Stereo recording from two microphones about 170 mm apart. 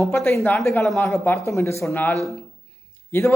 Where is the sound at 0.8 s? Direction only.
Centre (ahead or behind).